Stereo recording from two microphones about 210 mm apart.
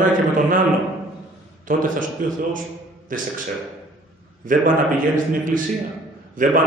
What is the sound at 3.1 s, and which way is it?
Speech, 40° right (ahead or behind).